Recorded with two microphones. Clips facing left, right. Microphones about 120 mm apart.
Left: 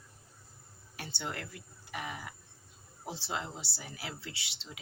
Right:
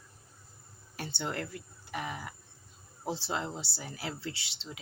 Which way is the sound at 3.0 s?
35° right (ahead or behind).